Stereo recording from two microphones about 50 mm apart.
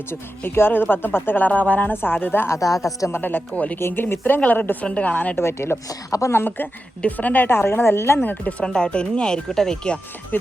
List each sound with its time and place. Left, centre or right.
0.1 s speech: left
1.9 s speech: left
3.5 s speech: left
3.8 s speech: left
4.4 s speech: left
4.9 s speech: left
5.4 s a woman's voice: left
6.1 s a woman's voice: left
6.3 s speech: left
7.2 s speech: left
7.6 s a woman's voice: left
8.2 s speech: left
8.6 s speech: centre